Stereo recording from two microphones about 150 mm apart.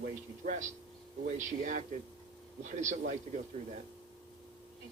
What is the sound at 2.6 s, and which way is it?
Speech, 55° right (ahead or behind).